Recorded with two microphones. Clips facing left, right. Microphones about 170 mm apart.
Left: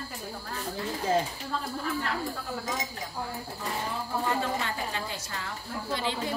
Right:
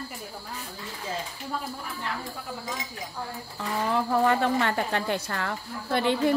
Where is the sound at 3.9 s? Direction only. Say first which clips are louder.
Right 8 dB; 70° right (ahead or behind).